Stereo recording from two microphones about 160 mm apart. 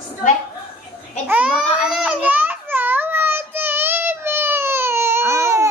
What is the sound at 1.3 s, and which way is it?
Baby cry, 5° right (ahead or behind).